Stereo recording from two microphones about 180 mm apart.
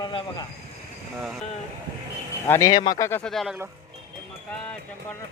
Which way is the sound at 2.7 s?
25° left (ahead or behind).